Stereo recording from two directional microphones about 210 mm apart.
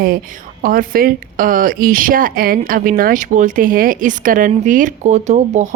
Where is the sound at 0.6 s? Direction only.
45° right (ahead or behind).